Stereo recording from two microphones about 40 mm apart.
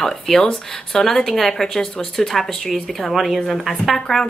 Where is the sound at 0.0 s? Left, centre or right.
Centre.